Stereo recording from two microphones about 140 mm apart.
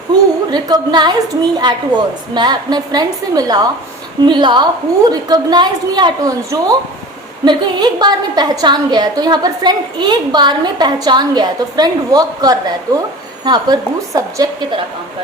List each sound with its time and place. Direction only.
0.5 s a woman's voice: 30° right (ahead or behind)